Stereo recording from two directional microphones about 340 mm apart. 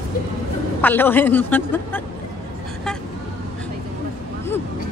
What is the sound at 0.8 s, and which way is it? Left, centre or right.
Speech, centre.